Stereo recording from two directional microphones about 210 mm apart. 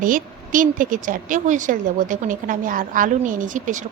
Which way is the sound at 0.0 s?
40° right (ahead or behind).